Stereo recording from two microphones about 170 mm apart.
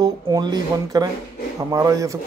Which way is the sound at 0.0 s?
25° right (ahead or behind).